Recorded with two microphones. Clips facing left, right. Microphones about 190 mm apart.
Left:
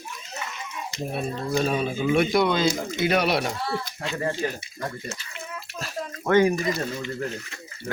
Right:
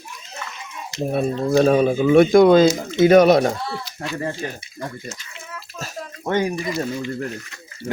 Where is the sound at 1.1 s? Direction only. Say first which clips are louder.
Right 9 dB; 50° right (ahead or behind).